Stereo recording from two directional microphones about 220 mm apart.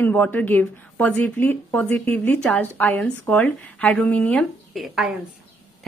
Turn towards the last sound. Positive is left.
turn(degrees=0)  # may be behind; listen again after turning